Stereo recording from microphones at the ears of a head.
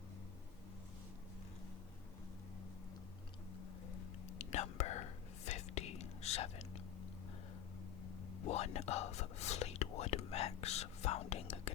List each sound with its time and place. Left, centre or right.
3.8 s whispering: left
8.0 s whispering: left